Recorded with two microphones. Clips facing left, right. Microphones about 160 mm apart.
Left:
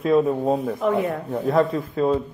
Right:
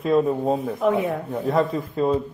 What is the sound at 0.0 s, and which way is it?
Speech, centre (ahead or behind).